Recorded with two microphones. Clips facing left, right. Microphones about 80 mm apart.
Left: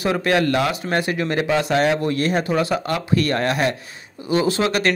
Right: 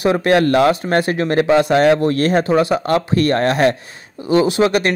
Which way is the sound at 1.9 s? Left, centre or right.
Right.